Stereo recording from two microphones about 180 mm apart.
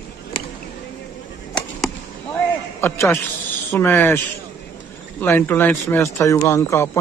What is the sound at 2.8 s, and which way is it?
A man's voice, 15° left (ahead or behind).